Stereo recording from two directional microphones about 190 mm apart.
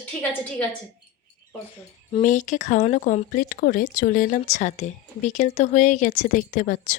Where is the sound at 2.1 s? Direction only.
40° left (ahead or behind).